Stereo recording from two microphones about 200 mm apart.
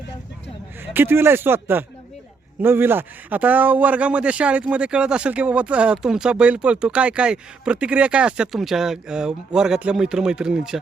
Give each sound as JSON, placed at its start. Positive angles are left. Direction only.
{"t": 0.9, "sound": "a man's voice", "side_deg": -10}